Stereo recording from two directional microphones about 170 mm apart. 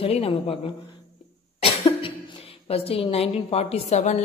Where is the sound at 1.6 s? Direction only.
30° left (ahead or behind).